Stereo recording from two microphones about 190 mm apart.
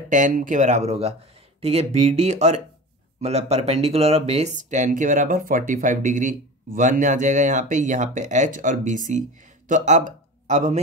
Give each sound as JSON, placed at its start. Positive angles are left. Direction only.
{"t": 0.1, "sound": "speech", "side_deg": -45}